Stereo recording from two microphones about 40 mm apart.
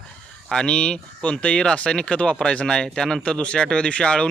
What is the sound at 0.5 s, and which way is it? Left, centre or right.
Speech, left.